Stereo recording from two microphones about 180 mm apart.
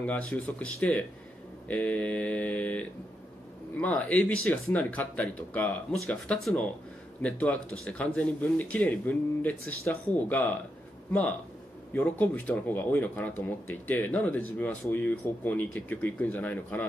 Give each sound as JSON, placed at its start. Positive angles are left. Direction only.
{"t": 0.0, "sound": "speech", "side_deg": 5}